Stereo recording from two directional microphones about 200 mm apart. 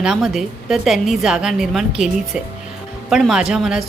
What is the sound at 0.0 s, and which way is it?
A woman's voice, centre (ahead or behind).